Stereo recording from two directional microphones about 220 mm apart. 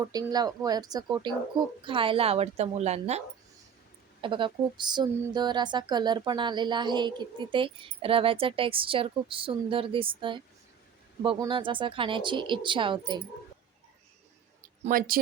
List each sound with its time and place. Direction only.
0.0 s speech: 15° right (ahead or behind)
14.8 s speech: 40° right (ahead or behind)